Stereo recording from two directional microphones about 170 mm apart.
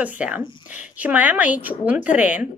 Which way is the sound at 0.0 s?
10° right (ahead or behind).